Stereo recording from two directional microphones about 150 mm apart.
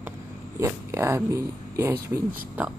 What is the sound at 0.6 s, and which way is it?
Speech, 20° right (ahead or behind).